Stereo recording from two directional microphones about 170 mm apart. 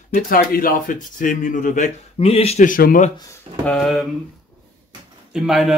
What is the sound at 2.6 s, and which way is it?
Speech, 55° left (ahead or behind).